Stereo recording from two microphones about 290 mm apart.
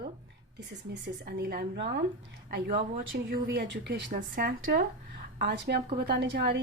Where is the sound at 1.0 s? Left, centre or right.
Right.